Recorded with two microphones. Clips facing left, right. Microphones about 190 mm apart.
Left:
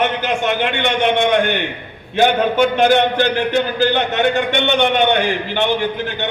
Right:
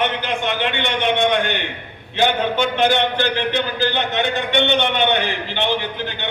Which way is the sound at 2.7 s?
45° left (ahead or behind).